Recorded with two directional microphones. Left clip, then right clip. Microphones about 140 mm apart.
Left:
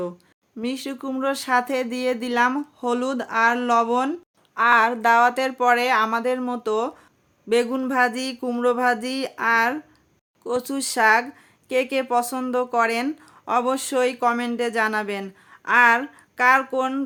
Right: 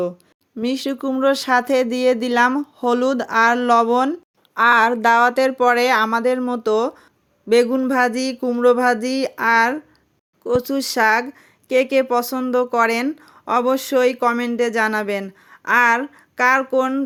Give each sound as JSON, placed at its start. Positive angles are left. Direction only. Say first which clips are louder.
{"t": 0.6, "sound": "speech", "louder": "right 6 dB", "side_deg": -40}